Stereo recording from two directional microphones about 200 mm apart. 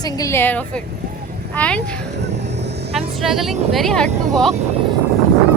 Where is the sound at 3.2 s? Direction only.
Centre (ahead or behind).